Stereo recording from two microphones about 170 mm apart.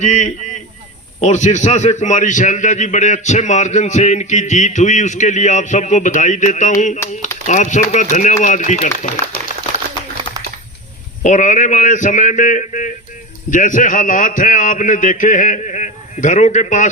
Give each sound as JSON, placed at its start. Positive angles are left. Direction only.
{"t": 0.0, "sound": "a man's voice", "side_deg": 45}
{"t": 11.2, "sound": "a man's voice", "side_deg": 45}